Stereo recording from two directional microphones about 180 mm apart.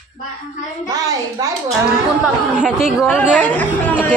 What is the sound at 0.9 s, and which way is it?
Speech, 20° right (ahead or behind).